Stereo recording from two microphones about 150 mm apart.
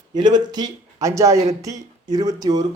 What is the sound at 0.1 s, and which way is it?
Speech, 30° right (ahead or behind).